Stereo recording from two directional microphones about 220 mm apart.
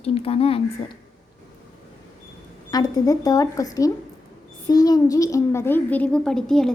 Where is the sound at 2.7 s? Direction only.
15° left (ahead or behind).